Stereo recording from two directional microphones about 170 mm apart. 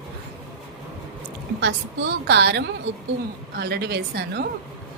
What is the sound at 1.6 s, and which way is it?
A woman's voice, 90° right.